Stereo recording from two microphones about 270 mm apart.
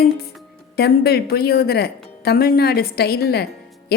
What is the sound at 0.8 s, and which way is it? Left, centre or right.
A woman's voice, left.